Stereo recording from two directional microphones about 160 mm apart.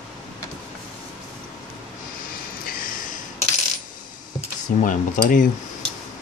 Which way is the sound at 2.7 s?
60° left (ahead or behind).